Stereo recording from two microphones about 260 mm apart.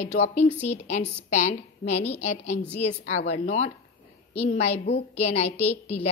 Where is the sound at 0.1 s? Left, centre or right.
Left.